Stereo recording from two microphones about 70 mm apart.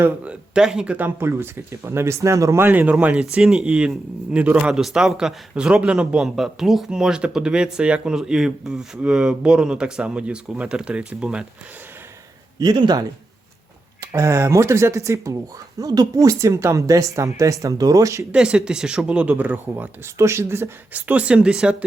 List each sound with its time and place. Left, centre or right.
0.3 s speech: centre
1.2 s speech: right
2.6 s speech: right
3.3 s speech: centre
4.7 s speech: centre
12.5 s speech: right
14.1 s speech: right
15.8 s speech: right
18.3 s speech: centre
20.1 s speech: right
20.9 s speech: centre